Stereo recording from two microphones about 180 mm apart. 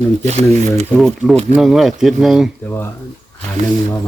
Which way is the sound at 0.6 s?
Centre (ahead or behind).